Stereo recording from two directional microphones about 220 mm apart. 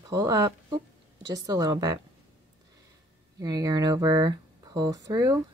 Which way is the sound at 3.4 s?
15° right (ahead or behind).